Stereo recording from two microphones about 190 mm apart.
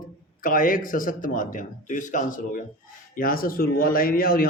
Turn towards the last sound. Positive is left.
turn(degrees=50)  # may be behind; listen again after turning